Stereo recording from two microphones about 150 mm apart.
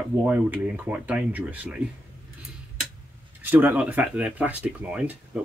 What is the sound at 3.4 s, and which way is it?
Speech, 15° right (ahead or behind).